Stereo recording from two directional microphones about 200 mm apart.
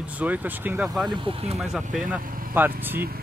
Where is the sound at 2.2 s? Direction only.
45° right (ahead or behind).